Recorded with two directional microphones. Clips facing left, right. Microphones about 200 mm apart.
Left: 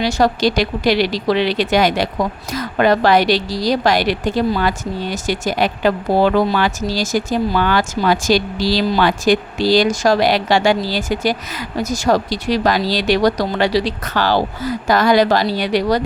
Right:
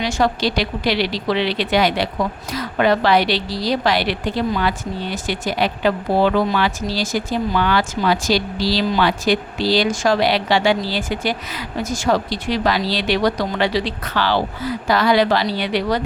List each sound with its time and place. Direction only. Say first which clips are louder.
0.0 s a woman's voice: left 4 dB; 40° left (ahead or behind)